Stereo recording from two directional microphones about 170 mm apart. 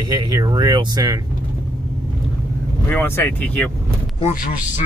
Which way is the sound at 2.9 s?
10° left (ahead or behind).